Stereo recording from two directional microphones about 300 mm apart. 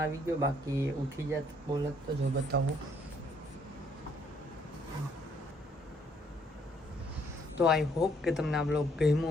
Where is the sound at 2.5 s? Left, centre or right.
Right.